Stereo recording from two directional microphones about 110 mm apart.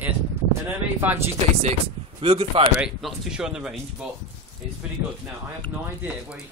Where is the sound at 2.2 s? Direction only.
55° right (ahead or behind).